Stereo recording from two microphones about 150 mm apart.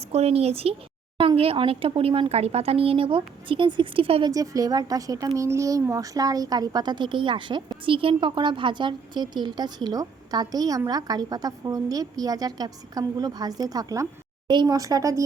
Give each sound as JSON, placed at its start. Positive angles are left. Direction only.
{"t": 0.1, "sound": "a woman's voice", "side_deg": -45}
{"t": 4.3, "sound": "a woman's voice", "side_deg": -25}